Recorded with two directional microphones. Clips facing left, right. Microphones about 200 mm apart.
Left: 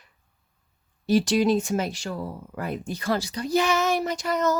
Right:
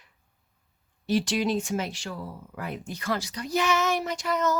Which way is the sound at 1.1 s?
40° left (ahead or behind).